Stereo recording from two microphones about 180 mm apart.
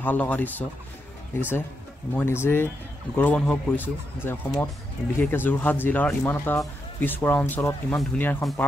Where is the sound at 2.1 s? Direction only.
15° left (ahead or behind).